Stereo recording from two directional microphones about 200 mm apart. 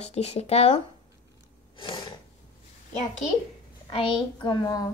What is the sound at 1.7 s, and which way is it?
Snort, 25° left (ahead or behind).